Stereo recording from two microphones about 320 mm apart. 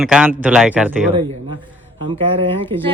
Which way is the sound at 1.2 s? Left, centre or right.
Centre.